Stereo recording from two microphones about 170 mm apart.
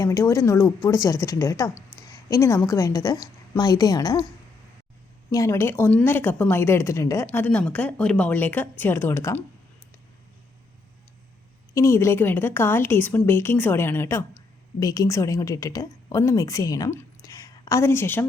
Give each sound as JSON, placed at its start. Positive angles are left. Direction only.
{"t": 0.0, "sound": "a woman's voice", "side_deg": 20}
{"t": 5.3, "sound": "a woman's voice", "side_deg": 15}
{"t": 11.7, "sound": "a woman's voice", "side_deg": 15}